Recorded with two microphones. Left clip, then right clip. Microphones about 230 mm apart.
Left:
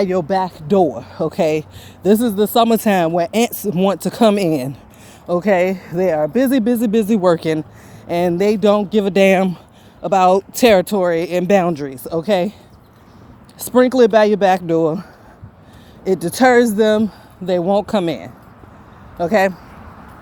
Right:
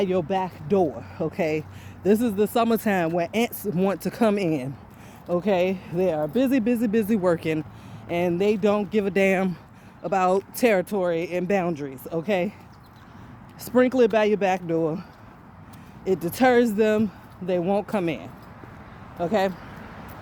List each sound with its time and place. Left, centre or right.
0.0 s speech: left
13.6 s speech: left
16.0 s speech: left
17.4 s speech: left
19.2 s speech: left